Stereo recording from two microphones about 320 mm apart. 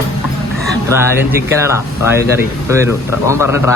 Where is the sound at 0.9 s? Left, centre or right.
Centre.